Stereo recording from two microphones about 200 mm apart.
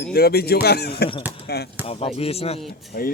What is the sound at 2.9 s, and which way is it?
Speech, 45° left (ahead or behind).